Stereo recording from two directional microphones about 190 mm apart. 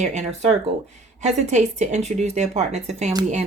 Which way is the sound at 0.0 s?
40° right (ahead or behind).